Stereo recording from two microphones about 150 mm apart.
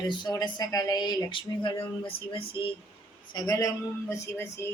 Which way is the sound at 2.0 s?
35° left (ahead or behind).